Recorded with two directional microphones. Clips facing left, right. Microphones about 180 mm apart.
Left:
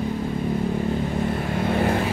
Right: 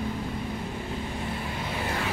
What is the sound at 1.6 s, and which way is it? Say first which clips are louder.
Vehicle: left 12 dB; 55° left (ahead or behind).